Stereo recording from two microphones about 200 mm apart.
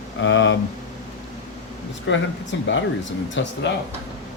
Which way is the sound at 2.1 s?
70° left (ahead or behind).